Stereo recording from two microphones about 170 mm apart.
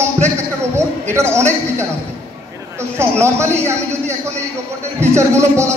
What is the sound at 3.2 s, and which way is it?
Speech, 15° right (ahead or behind).